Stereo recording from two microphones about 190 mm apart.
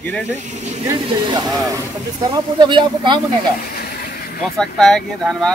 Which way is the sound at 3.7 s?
55° left (ahead or behind).